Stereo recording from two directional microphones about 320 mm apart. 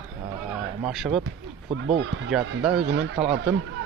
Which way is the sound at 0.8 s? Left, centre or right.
Centre.